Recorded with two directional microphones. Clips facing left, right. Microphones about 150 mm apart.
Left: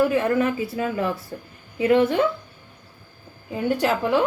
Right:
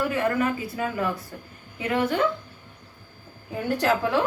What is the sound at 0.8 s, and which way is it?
A woman's voice, 25° left (ahead or behind).